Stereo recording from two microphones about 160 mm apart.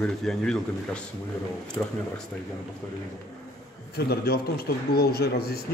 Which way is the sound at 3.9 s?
80° left.